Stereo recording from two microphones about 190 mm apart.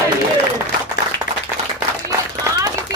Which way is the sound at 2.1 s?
15° right (ahead or behind).